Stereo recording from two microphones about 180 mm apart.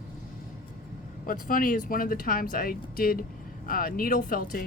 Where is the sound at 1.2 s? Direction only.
50° left (ahead or behind).